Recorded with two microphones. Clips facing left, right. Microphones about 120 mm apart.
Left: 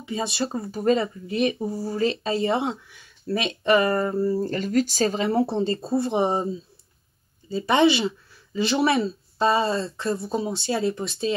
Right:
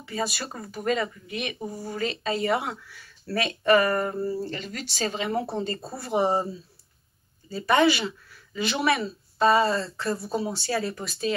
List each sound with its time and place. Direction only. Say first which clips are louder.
0.0 s speech: left 4 dB; 20° left (ahead or behind)
4.3 s speech: left 7 dB; 45° left (ahead or behind); by 11.3 s 25° left (ahead or behind)